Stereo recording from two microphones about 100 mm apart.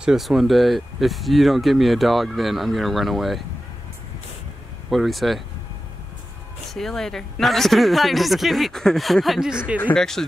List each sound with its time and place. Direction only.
0.0 s speech: 5° right (ahead or behind)
4.8 s speech: centre (ahead or behind)
6.7 s speech: 5° left (ahead or behind)